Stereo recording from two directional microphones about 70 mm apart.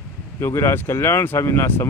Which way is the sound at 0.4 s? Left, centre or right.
Left.